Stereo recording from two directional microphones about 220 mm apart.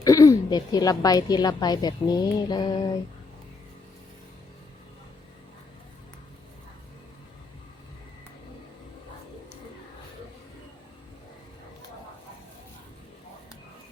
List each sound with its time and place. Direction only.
0.0 s a woman's voice: 15° left (ahead or behind)